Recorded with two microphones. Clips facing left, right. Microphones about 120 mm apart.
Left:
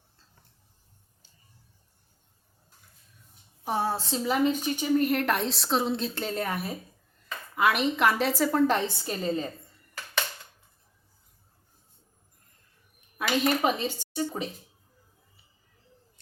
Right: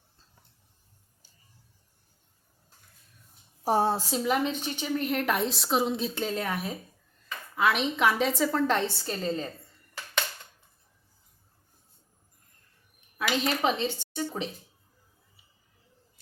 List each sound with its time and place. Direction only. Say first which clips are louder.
3.6 s a woman's voice: right 4 dB; 35° right (ahead or behind)
3.9 s speech: right 1 dB; 10° right (ahead or behind)
4.2 s a woman's voice: left 5 dB; 5° left (ahead or behind)
13.1 s speech: left 3 dB; 5° left (ahead or behind)